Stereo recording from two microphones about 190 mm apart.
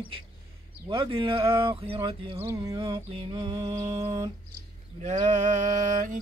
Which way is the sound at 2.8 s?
30° right (ahead or behind).